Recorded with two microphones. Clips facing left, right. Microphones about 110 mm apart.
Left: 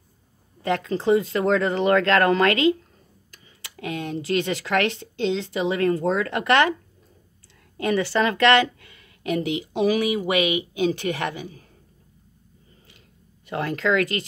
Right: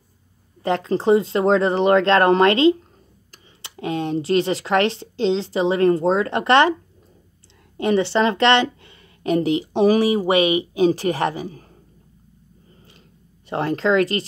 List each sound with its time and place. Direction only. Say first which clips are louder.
0.6 s speech: right 3 dB; 30° right (ahead or behind)
7.7 s speech: right 4 dB; 25° right (ahead or behind)
13.5 s speech: right 4 dB; 30° right (ahead or behind)